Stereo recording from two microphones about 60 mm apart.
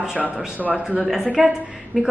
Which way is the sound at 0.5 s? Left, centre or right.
Right.